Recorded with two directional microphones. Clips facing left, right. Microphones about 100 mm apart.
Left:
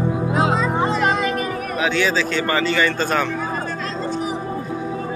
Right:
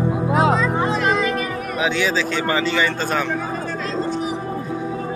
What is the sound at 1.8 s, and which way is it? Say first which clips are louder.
A man's voice: left 1 dB; 10° right (ahead or behind).